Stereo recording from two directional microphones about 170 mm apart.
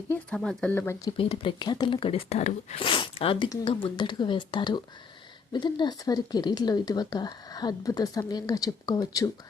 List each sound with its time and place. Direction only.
0.1 s speech: 5° left (ahead or behind)
1.1 s speech: 35° left (ahead or behind)